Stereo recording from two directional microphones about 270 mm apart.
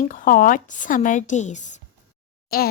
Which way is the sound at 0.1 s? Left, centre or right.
Left.